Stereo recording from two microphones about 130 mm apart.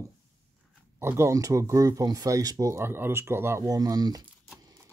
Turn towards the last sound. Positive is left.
turn(degrees=-30)  # may be behind; listen again after turning